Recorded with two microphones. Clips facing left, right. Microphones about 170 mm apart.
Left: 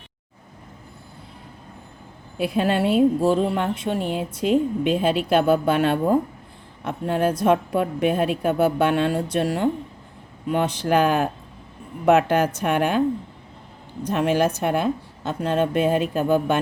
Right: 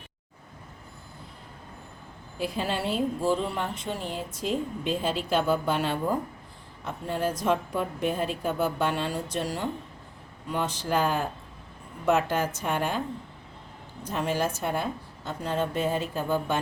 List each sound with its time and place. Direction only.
2.4 s a woman's voice: 60° left (ahead or behind)
14.1 s a woman's voice: 70° left (ahead or behind)